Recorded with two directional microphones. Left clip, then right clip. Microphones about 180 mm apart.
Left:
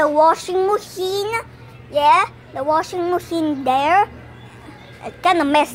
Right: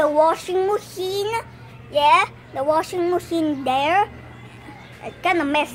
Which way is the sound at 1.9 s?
Centre (ahead or behind).